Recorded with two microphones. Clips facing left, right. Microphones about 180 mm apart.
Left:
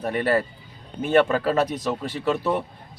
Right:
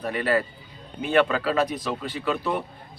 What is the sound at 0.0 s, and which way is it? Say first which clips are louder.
Speech: left 2 dB; 45° left (ahead or behind).